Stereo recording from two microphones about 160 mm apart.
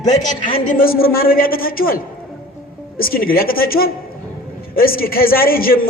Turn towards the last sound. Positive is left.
turn(degrees=65)  # may be behind; listen again after turning